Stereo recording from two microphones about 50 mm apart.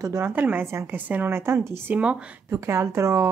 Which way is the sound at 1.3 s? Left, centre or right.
Right.